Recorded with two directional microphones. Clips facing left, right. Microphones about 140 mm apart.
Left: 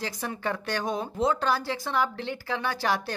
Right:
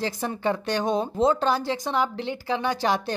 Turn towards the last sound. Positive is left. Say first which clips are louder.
# right 4 dB
turn(degrees=-20)  # may be behind; listen again after turning